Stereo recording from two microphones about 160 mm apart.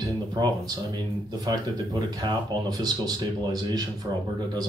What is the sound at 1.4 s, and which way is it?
Speech, 25° right (ahead or behind).